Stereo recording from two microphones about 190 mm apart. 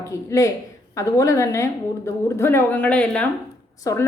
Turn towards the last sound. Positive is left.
turn(degrees=15)  # may be behind; listen again after turning